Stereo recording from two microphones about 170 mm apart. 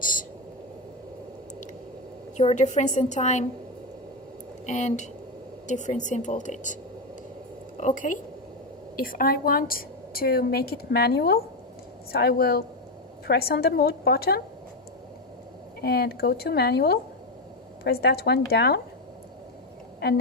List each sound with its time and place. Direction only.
0.0 s a sound: 50° left (ahead or behind)
2.4 s a woman's voice: 40° left (ahead or behind)
4.6 s a woman's voice: 45° left (ahead or behind)
7.8 s a woman's voice: 50° left (ahead or behind); by 14.4 s 65° left (ahead or behind)
15.8 s a woman's voice: 70° left (ahead or behind)